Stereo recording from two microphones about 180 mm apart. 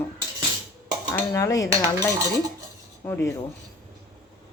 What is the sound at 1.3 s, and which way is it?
Speech, 20° left (ahead or behind).